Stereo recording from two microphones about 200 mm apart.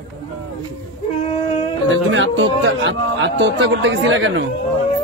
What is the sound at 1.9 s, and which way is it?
A man's voice, 70° right (ahead or behind).